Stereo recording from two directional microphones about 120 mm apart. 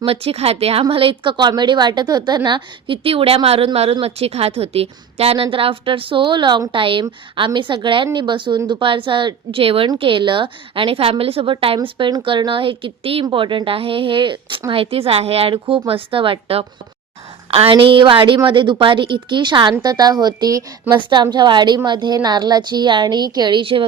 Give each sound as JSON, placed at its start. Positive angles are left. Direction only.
{"t": 0.0, "sound": "a woman's voice", "side_deg": -55}